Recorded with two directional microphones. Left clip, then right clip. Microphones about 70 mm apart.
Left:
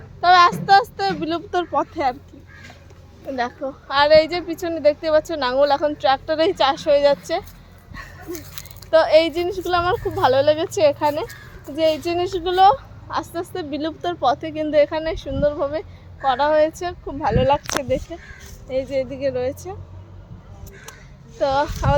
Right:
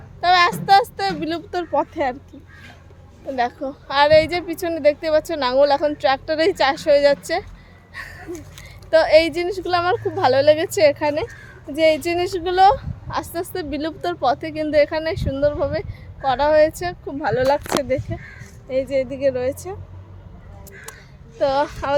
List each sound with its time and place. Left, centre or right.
0.2 s a sound: right
1.7 s speech: right
3.3 s a woman's voice: right
7.9 s a sound: right
8.9 s a woman's voice: right
10.0 s a woman's voice: right
18.7 s a woman's voice: right
21.3 s a woman's voice: right